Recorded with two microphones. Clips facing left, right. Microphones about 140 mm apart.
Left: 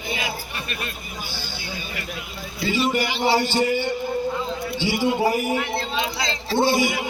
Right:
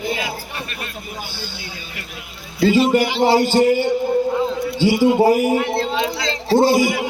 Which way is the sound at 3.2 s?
45° right (ahead or behind).